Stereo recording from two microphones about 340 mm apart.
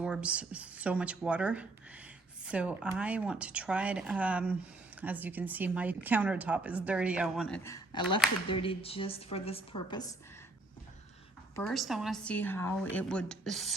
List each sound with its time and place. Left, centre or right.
0.0 s a woman's voice: centre
11.5 s a woman's voice: centre